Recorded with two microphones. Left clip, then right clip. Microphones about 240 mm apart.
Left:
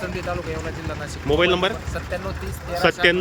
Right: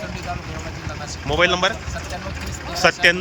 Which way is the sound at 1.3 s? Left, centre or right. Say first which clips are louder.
Right 1 dB; centre.